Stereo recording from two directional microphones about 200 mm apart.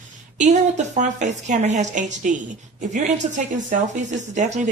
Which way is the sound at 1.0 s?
35° right (ahead or behind).